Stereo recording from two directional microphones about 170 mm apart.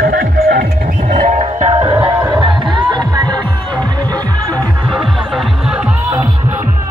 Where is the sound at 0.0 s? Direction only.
60° right (ahead or behind).